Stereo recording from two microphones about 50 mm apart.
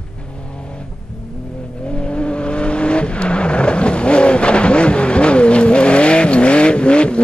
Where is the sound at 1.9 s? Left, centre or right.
Left.